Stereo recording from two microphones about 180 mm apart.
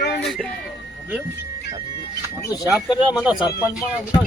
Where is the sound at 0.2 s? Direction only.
Centre (ahead or behind).